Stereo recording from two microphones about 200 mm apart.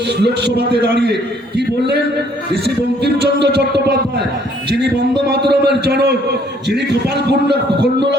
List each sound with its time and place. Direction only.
0.1 s a man's voice: 55° right (ahead or behind)